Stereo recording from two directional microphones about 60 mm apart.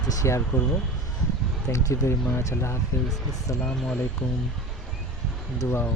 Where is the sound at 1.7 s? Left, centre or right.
Left.